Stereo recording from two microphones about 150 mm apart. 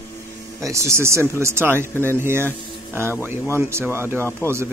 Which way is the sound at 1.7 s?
15° left (ahead or behind).